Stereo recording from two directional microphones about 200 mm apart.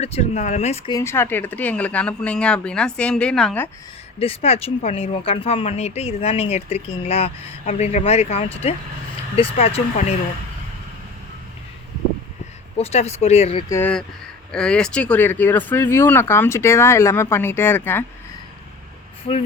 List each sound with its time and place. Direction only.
0.0 s speech: 35° left (ahead or behind)
0.9 s speech: 10° left (ahead or behind)
4.2 s speech: 30° left (ahead or behind)
12.7 s speech: 30° left (ahead or behind)
13.7 s speech: 10° left (ahead or behind)